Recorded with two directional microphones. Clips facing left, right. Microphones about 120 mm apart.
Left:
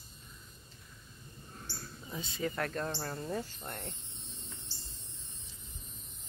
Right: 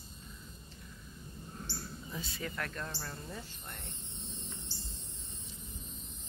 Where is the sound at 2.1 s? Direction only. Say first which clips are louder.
Left 6 dB; 25° left (ahead or behind).